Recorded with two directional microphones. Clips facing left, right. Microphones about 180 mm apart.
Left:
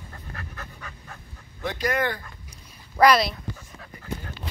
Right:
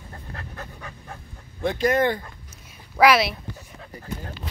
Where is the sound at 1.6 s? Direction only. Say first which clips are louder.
Right 5 dB; 25° right (ahead or behind).